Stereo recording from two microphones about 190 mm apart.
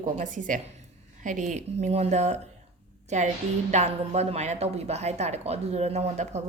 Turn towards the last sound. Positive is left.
turn(degrees=-35)  # may be behind; listen again after turning